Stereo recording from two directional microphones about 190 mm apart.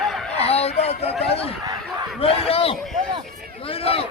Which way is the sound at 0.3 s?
30° left (ahead or behind).